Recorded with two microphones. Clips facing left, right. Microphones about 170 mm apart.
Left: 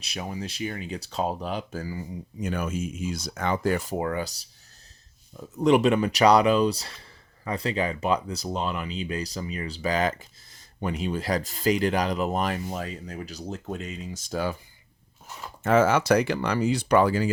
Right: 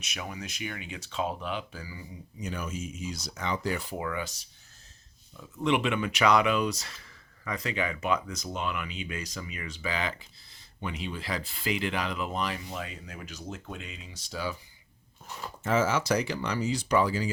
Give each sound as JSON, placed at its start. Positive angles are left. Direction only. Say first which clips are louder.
{"t": 0.0, "sound": "speech", "louder": "left 5 dB", "side_deg": 35}
{"t": 15.6, "sound": "speech", "louder": "left 6 dB", "side_deg": 60}